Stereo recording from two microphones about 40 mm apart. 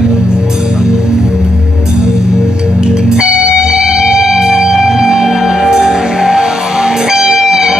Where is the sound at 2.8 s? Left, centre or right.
Centre.